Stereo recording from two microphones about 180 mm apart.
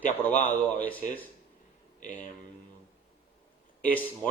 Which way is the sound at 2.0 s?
45° left (ahead or behind).